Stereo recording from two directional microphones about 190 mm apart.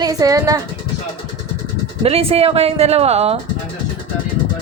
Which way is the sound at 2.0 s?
30° right (ahead or behind).